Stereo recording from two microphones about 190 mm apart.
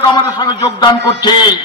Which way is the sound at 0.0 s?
25° left (ahead or behind).